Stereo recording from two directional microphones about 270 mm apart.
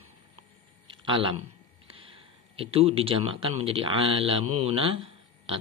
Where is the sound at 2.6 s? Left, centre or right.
Right.